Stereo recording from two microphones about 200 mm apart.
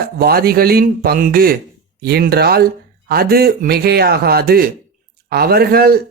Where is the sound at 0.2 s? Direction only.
50° right (ahead or behind).